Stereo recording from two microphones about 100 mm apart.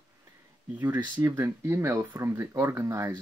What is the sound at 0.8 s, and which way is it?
Speech, 20° right (ahead or behind).